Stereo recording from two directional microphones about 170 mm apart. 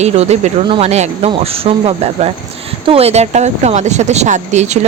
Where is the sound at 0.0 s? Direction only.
40° right (ahead or behind).